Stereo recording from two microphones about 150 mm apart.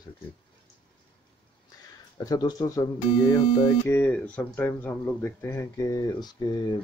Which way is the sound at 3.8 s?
15° left (ahead or behind).